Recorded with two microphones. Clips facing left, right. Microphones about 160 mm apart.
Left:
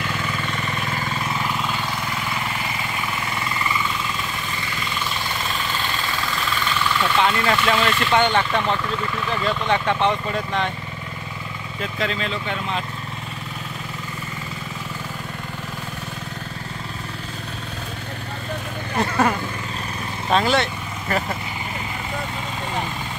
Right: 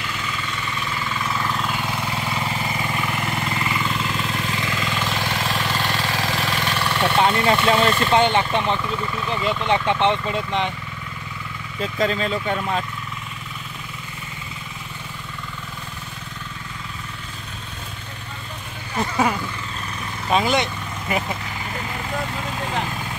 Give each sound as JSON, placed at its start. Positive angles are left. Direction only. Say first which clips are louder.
{"t": 0.0, "sound": "vehicle", "louder": "left 3 dB", "side_deg": 50}
{"t": 4.1, "sound": "vehicle", "louder": "right 3 dB", "side_deg": -80}
{"t": 7.0, "sound": "speech", "louder": "right 3 dB", "side_deg": -30}
{"t": 11.8, "sound": "speech", "louder": "right 4 dB", "side_deg": -35}
{"t": 20.2, "sound": "vehicle", "louder": "even", "side_deg": -10}